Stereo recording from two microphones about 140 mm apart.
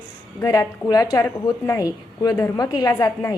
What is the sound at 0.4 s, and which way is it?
A woman's voice, 25° left (ahead or behind).